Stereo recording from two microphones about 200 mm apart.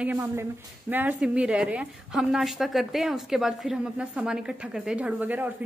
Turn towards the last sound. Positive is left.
turn(degrees=-10)  # may be behind; listen again after turning